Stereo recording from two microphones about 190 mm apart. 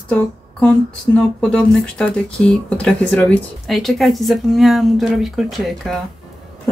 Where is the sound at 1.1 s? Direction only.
5° left (ahead or behind).